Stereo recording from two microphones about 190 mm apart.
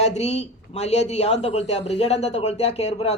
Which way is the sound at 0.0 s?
35° left (ahead or behind).